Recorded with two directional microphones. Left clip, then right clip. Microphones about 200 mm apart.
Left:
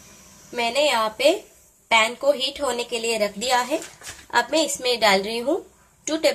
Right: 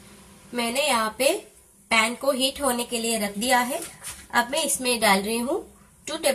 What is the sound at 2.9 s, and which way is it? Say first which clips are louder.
A woman's voice: left 4 dB; 30° left (ahead or behind).